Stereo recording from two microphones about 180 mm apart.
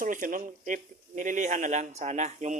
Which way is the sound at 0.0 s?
50° right (ahead or behind).